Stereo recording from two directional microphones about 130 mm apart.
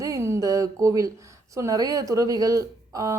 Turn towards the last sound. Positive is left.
turn(degrees=-25)  # may be behind; listen again after turning